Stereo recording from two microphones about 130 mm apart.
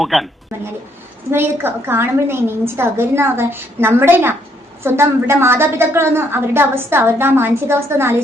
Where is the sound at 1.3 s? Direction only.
15° right (ahead or behind).